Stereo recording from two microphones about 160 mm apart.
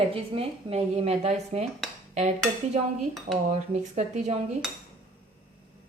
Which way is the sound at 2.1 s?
45° right (ahead or behind).